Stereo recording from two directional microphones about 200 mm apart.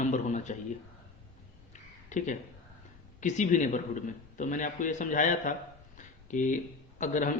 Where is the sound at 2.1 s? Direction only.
40° left (ahead or behind).